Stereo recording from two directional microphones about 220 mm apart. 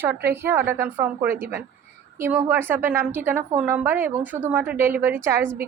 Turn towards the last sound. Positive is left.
turn(degrees=-10)  # may be behind; listen again after turning